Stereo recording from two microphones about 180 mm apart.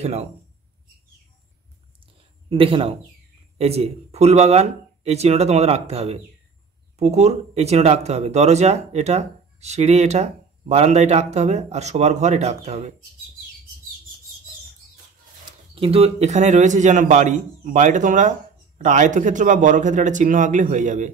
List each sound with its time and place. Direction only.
0.0 s speech: 35° right (ahead or behind)
2.5 s speech: 30° right (ahead or behind)
15.7 s a man's voice: 30° right (ahead or behind)